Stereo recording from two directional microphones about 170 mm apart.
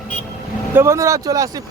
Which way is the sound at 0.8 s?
15° right (ahead or behind).